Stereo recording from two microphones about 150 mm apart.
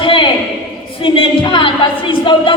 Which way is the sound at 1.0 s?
30° left (ahead or behind).